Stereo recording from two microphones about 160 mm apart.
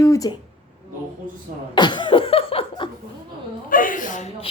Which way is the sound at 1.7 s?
30° left (ahead or behind).